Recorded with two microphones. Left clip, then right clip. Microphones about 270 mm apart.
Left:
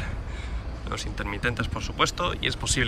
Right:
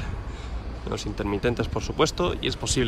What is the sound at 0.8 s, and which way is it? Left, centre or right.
Speech, centre.